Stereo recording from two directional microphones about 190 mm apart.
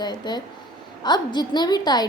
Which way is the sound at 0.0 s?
20° left (ahead or behind).